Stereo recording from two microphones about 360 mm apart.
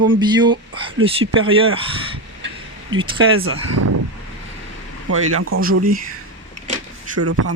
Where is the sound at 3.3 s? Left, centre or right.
Right.